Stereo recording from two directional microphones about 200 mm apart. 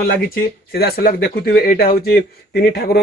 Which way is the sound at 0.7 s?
50° left (ahead or behind).